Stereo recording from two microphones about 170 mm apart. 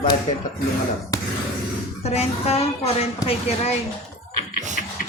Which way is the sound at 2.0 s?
35° left (ahead or behind).